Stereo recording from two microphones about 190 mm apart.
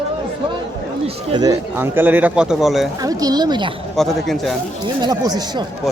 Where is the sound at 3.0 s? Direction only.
20° right (ahead or behind).